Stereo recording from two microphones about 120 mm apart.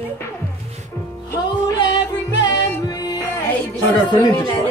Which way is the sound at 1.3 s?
30° left (ahead or behind).